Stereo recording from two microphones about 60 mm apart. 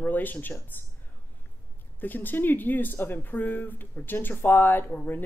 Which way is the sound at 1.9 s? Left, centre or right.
Left.